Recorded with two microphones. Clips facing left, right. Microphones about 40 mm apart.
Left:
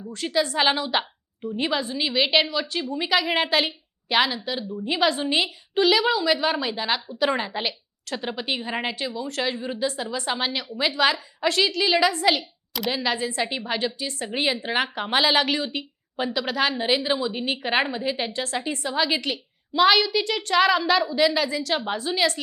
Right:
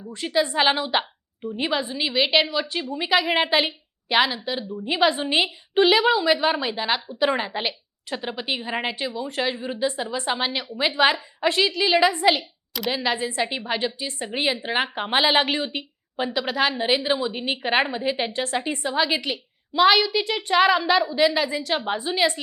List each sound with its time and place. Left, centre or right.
0.5 s a woman's voice: centre
9.7 s a woman's voice: right
10.0 s a woman's voice: centre
10.9 s a woman's voice: right
11.3 s a woman's voice: centre
12.7 s speech: centre
13.1 s a woman's voice: right
13.4 s a woman's voice: centre
16.1 s a woman's voice: centre
18.9 s a woman's voice: centre